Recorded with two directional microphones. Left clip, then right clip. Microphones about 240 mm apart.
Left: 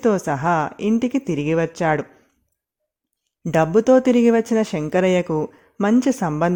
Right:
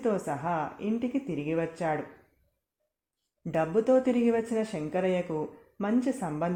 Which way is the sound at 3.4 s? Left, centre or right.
Left.